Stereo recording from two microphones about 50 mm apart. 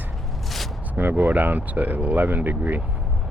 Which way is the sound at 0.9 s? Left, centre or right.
Right.